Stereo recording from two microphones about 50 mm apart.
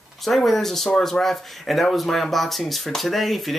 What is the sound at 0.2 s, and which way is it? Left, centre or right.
Speech, centre.